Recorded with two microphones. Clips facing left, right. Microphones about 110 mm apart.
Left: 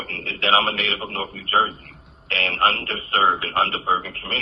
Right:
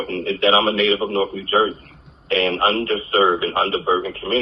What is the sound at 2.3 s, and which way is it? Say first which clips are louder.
A man's voice: right 4 dB; 20° right (ahead or behind).